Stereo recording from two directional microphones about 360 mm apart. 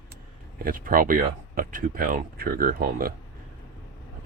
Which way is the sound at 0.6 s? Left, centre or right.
Right.